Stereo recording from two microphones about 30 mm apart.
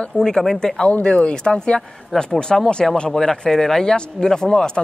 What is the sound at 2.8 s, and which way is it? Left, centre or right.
Speech, centre.